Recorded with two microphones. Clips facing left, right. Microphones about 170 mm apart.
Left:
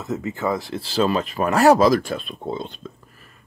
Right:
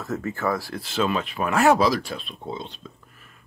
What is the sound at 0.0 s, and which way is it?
Speech, 20° left (ahead or behind).